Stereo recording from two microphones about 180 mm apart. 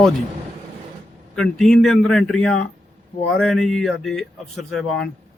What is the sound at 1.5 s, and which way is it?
Speech, centre (ahead or behind).